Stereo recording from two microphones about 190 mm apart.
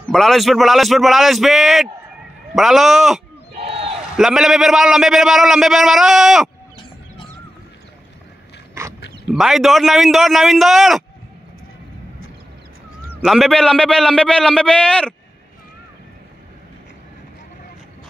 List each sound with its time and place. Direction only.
0.1 s a man's voice: centre (ahead or behind)
3.5 s crowd: 30° right (ahead or behind)
4.2 s a man's voice: centre (ahead or behind)
9.3 s a man's voice: centre (ahead or behind)
13.2 s a man's voice: centre (ahead or behind)